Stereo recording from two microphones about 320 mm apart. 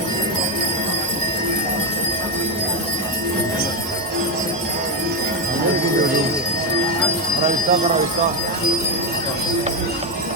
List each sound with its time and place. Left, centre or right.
7.4 s speech: right